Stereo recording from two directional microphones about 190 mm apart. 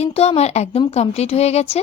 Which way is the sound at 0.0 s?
35° left (ahead or behind).